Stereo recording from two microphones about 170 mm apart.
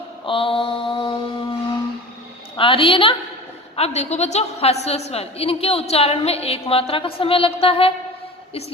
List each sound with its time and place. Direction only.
0.3 s mantra: 30° left (ahead or behind)
2.6 s a woman's voice: 30° left (ahead or behind)